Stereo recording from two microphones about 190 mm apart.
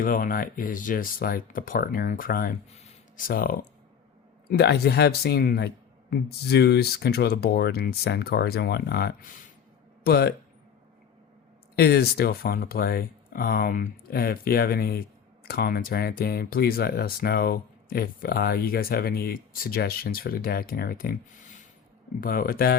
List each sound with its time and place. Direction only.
0.0 s speech: 45° left (ahead or behind)
2.7 s a sound: 35° left (ahead or behind)
3.2 s speech: 50° left (ahead or behind)
4.4 s speech: 60° left (ahead or behind)
11.8 s speech: 55° left (ahead or behind)